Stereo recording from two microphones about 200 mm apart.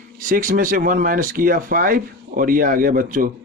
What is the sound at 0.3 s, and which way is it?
A man's voice, 45° right (ahead or behind).